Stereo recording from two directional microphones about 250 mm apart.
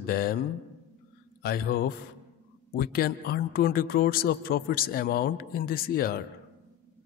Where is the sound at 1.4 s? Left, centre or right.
Left.